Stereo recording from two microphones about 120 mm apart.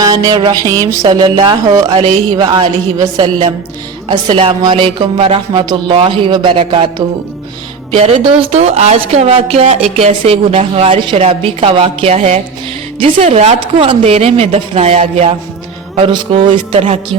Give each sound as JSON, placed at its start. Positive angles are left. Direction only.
{"t": 0.0, "sound": "a sound", "side_deg": -35}
{"t": 4.3, "sound": "speech", "side_deg": -50}
{"t": 5.6, "sound": "speech", "side_deg": -40}
{"t": 7.9, "sound": "speech", "side_deg": -55}
{"t": 16.0, "sound": "speech", "side_deg": -45}